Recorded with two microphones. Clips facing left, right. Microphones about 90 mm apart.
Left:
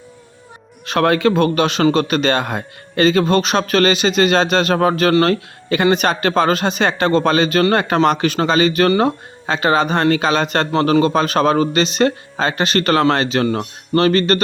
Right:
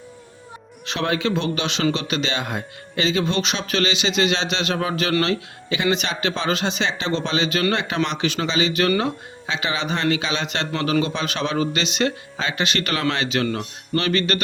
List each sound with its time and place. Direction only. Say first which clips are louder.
0.9 s speech: left 8 dB; 55° left (ahead or behind)